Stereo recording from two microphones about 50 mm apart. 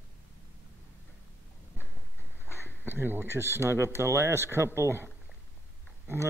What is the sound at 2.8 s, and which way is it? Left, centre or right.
Speech, right.